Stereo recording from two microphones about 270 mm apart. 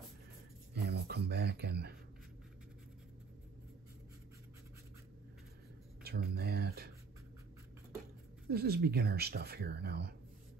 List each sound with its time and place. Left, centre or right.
0.7 s a sound: right
6.0 s speech: right
8.5 s speech: right